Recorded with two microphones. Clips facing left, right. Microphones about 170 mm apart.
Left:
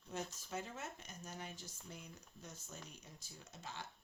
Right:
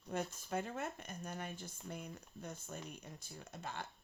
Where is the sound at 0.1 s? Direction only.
55° right (ahead or behind).